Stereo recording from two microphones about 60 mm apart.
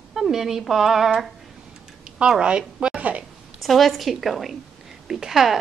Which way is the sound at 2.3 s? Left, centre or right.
Centre.